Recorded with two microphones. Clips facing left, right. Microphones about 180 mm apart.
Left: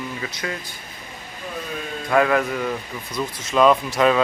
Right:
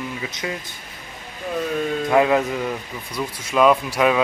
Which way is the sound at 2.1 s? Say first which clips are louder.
Even; 20° right (ahead or behind).